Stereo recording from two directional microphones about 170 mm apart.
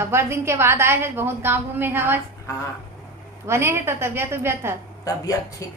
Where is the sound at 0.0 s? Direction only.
15° right (ahead or behind).